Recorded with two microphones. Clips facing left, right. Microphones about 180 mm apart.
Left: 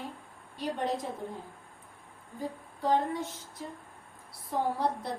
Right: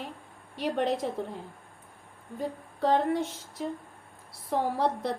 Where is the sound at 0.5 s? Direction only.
80° right.